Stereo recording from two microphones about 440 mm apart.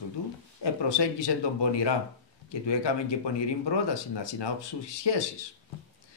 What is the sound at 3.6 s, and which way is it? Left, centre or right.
Speech, left.